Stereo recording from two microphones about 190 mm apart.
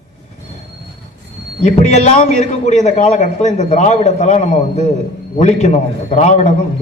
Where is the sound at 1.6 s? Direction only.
35° left (ahead or behind).